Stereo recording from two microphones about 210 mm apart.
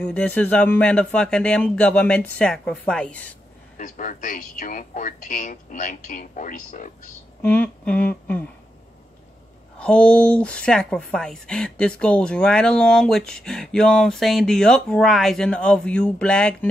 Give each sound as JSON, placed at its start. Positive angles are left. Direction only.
{"t": 0.0, "sound": "speech", "side_deg": 5}
{"t": 3.7, "sound": "speech", "side_deg": 40}
{"t": 7.4, "sound": "humming", "side_deg": 5}
{"t": 9.8, "sound": "speech", "side_deg": 5}